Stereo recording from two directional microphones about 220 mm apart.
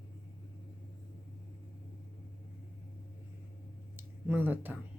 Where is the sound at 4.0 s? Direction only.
10° right (ahead or behind).